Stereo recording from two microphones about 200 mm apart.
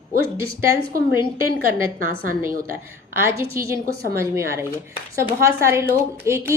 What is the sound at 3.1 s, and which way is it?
A woman's voice, 10° right (ahead or behind).